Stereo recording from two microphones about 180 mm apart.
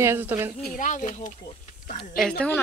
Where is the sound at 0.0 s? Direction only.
10° right (ahead or behind).